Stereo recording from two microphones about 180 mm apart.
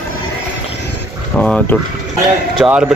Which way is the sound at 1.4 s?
5° left (ahead or behind).